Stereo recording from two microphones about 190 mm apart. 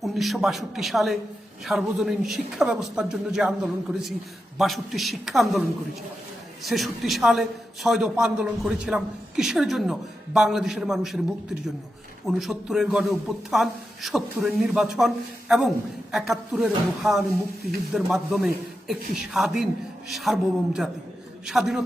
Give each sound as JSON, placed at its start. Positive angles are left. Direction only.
{"t": 0.0, "sound": "a man's voice", "side_deg": 0}